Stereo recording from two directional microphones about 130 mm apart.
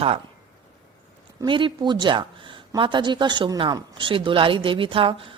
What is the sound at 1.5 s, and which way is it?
A woman's voice, 40° right (ahead or behind).